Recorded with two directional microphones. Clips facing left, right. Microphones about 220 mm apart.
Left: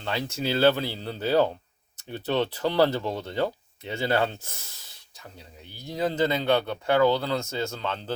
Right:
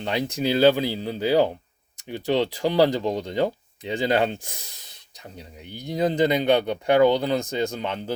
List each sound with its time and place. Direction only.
0.0 s speech: 15° right (ahead or behind)